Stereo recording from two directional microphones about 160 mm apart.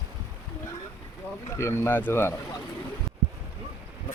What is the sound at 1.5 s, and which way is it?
Speech, 15° left (ahead or behind).